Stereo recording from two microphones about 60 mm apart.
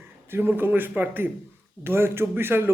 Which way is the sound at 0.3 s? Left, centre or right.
Right.